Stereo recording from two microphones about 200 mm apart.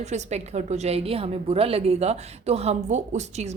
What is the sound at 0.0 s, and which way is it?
A woman's voice, 35° right (ahead or behind).